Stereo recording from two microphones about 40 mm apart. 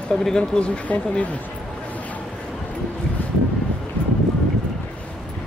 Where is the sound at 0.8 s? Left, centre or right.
Left.